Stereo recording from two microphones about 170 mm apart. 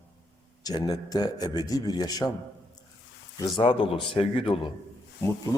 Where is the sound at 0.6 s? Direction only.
20° left (ahead or behind).